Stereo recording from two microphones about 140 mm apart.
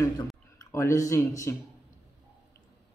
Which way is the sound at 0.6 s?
25° left (ahead or behind).